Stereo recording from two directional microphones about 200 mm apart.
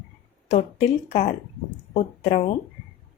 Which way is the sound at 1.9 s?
35° left (ahead or behind).